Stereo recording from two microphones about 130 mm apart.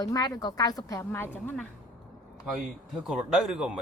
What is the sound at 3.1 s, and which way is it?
Speech, 5° right (ahead or behind).